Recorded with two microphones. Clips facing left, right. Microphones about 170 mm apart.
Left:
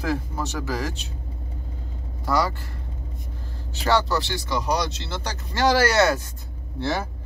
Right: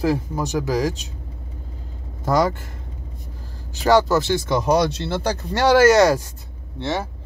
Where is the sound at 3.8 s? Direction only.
40° right (ahead or behind).